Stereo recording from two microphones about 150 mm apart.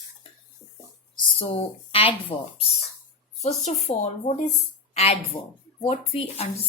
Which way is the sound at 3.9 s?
50° left (ahead or behind).